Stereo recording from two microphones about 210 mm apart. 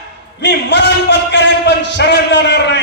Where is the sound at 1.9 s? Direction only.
55° left (ahead or behind).